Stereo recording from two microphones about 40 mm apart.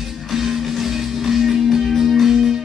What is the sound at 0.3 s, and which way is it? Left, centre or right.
Music, centre.